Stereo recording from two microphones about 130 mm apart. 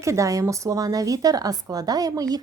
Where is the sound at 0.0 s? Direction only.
25° right (ahead or behind).